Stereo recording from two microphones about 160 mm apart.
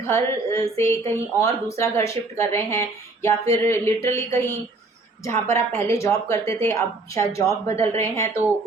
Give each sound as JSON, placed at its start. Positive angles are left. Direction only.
{"t": 0.0, "sound": "a woman's voice", "side_deg": 20}